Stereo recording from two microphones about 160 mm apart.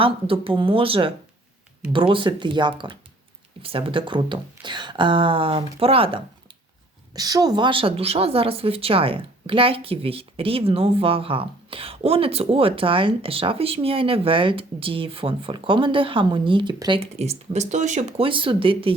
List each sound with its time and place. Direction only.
0.0 s a woman's voice: 35° right (ahead or behind)
7.1 s a woman's voice: 25° right (ahead or behind); by 18.3 s 45° right (ahead or behind)
18.3 s a woman's voice: 35° right (ahead or behind)